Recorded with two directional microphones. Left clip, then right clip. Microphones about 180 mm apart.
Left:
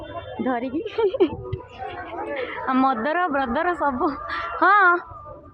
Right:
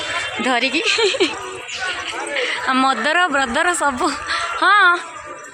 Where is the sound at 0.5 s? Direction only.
5° left (ahead or behind).